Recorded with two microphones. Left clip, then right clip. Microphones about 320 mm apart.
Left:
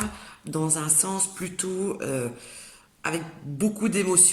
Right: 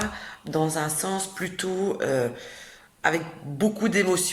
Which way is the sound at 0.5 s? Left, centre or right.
Right.